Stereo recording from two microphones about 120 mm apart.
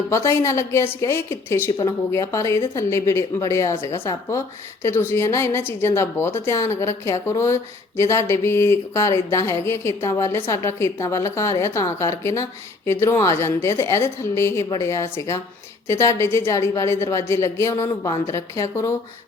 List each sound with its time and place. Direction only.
0.1 s speech: 20° left (ahead or behind)